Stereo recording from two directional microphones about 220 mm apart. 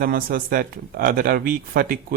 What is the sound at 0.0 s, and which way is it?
Speech, 40° right (ahead or behind).